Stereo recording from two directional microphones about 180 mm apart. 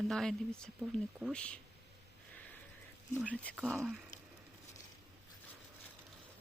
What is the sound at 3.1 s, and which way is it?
Speech, 10° right (ahead or behind).